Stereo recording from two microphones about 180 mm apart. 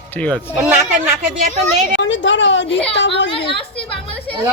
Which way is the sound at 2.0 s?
90° left.